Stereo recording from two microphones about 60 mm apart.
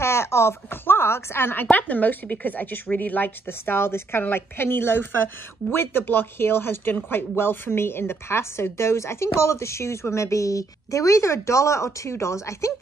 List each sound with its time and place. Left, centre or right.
0.0 s a woman's voice: left